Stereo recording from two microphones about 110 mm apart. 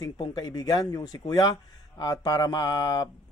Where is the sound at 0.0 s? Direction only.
40° left (ahead or behind).